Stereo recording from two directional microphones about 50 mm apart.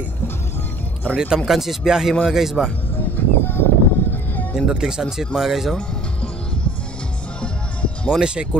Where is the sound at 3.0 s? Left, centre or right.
Left.